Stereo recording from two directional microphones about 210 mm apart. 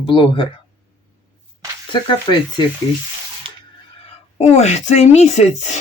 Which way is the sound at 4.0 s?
30° left (ahead or behind).